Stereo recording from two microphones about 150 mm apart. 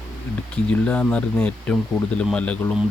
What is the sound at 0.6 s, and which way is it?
Speech, 10° left (ahead or behind).